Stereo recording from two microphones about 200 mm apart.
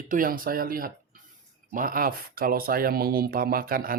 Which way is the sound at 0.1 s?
45° right (ahead or behind).